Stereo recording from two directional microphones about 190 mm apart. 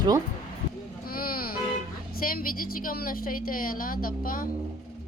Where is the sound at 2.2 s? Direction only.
50° left (ahead or behind).